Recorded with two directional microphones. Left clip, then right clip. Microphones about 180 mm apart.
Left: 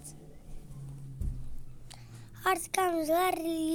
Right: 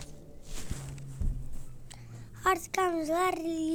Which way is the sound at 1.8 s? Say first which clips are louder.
Left 1 dB; centre (ahead or behind).